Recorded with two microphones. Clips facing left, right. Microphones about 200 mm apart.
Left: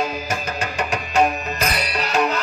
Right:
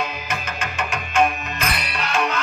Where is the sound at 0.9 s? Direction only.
40° left (ahead or behind).